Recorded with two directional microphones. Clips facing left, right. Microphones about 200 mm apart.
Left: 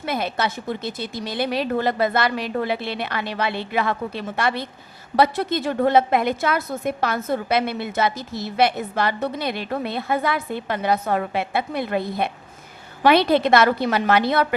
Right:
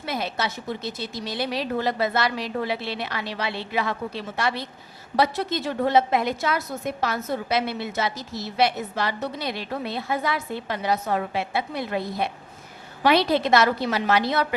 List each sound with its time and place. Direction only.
0.0 s a woman's voice: 55° left (ahead or behind)